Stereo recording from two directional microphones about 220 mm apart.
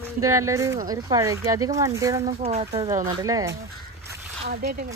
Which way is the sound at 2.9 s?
15° right (ahead or behind).